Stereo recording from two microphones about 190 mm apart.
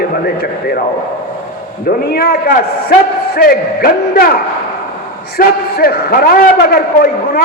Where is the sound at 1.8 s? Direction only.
55° left (ahead or behind).